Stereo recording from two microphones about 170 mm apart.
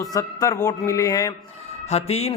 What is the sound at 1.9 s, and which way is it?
Speech, 35° left (ahead or behind).